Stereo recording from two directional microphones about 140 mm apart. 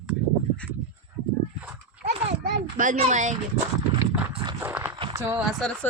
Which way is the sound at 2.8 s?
60° right (ahead or behind).